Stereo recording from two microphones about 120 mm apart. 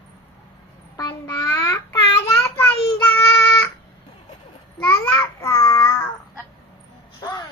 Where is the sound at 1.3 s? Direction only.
30° left (ahead or behind).